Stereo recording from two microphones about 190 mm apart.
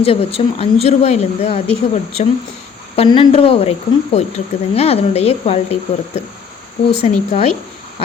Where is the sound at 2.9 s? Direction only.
30° left (ahead or behind).